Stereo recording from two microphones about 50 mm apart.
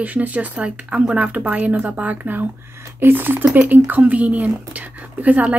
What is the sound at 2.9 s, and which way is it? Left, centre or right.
Speech, right.